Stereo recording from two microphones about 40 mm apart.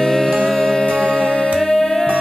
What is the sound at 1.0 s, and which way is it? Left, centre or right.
Music, left.